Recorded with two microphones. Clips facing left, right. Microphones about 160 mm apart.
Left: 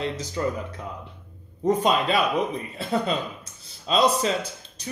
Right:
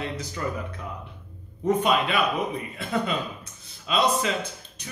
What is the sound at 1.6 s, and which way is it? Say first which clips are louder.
Speech: left 1 dB; 35° left (ahead or behind).